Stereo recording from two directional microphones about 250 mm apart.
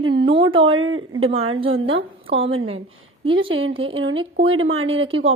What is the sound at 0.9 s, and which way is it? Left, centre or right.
Speech, right.